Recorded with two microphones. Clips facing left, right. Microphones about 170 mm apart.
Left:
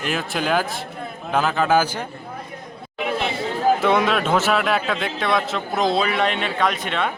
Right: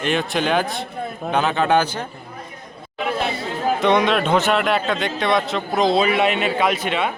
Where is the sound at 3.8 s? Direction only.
5° left (ahead or behind).